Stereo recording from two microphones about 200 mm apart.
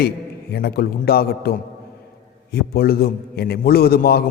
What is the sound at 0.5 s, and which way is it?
A man's voice, 50° left (ahead or behind).